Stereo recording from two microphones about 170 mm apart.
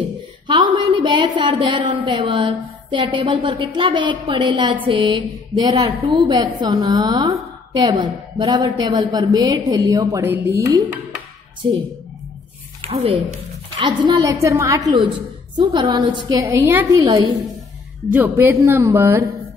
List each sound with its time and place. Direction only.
0.5 s a woman's voice: 25° right (ahead or behind)
12.8 s a woman's voice: 35° right (ahead or behind)
16.4 s speech: 15° right (ahead or behind)